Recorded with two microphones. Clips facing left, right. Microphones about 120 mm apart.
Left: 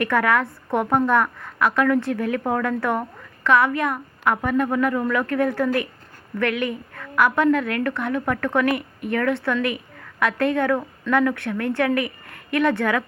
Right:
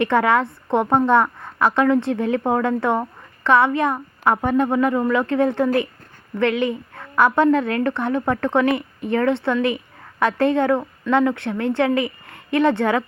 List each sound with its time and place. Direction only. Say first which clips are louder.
0.0 s a woman's voice: right 3 dB; 25° right (ahead or behind)